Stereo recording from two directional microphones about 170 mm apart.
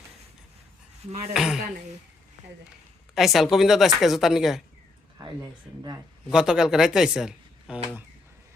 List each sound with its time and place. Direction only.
1.3 s speech: centre (ahead or behind)
3.2 s speech: centre (ahead or behind)
5.1 s speech: 20° right (ahead or behind)
6.3 s speech: 5° right (ahead or behind)